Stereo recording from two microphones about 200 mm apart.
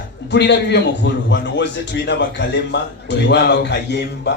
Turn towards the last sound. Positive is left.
turn(degrees=60)  # may be behind; listen again after turning